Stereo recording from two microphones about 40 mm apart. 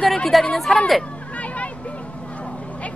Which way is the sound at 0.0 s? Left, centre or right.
Centre.